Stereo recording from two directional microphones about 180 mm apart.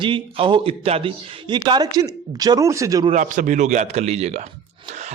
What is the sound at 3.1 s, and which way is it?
A man's voice, 45° right (ahead or behind).